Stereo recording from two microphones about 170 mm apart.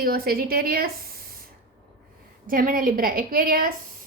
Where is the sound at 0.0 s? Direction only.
60° right (ahead or behind).